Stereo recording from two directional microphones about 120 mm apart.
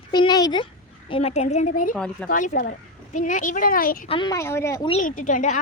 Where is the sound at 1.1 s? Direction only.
60° left (ahead or behind); by 1.9 s 80° left.